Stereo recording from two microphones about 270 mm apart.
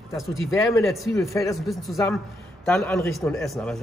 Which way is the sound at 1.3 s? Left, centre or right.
Centre.